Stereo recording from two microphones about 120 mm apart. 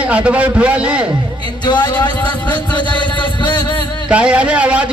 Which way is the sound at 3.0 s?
40° left (ahead or behind).